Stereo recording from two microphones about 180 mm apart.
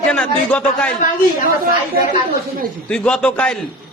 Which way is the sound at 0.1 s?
5° left (ahead or behind).